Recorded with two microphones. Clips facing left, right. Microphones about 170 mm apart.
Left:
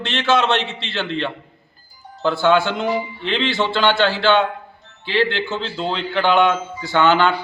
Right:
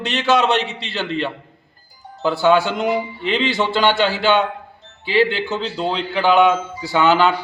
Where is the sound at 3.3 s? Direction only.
15° right (ahead or behind).